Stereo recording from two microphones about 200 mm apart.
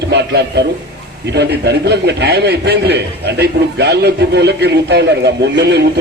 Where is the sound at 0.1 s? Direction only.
55° right (ahead or behind).